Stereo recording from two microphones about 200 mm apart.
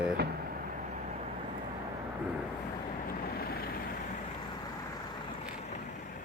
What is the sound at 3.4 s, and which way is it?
Vehicle, 50° left (ahead or behind).